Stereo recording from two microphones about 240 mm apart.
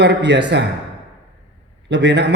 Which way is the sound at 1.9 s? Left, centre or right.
Right.